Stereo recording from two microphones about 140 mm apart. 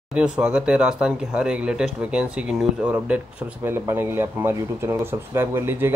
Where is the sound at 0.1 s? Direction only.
10° right (ahead or behind).